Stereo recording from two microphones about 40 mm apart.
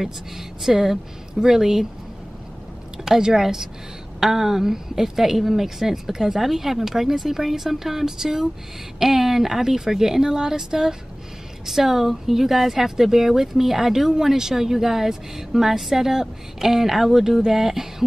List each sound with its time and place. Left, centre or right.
0.6 s speech: centre
3.1 s speech: centre